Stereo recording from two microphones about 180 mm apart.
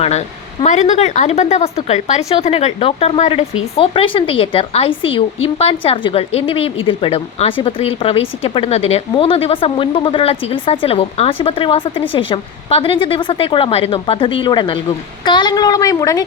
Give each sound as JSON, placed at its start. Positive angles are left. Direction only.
{"t": 0.0, "sound": "a woman's voice", "side_deg": 40}